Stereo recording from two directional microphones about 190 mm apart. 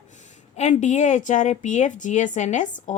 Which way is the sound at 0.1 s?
40° left (ahead or behind).